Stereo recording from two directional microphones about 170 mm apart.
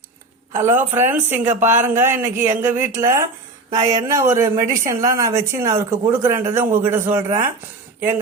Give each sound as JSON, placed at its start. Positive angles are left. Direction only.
{"t": 0.5, "sound": "speech", "side_deg": -15}